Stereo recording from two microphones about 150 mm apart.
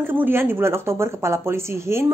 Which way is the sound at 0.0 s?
15° right (ahead or behind).